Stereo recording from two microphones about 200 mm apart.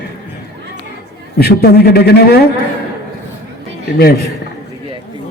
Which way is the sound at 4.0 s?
50° left (ahead or behind).